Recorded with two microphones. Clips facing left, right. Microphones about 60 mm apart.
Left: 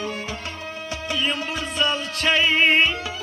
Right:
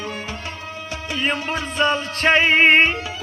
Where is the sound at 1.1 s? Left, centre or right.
Right.